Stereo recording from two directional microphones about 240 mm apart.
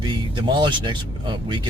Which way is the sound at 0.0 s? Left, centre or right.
Centre.